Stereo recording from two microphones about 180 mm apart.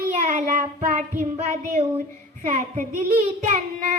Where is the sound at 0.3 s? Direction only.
40° right (ahead or behind).